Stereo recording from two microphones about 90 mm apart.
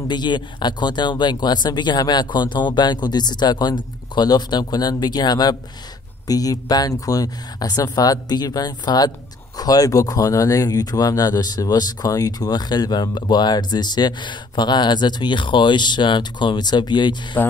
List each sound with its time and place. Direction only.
0.1 s speech: 55° left (ahead or behind)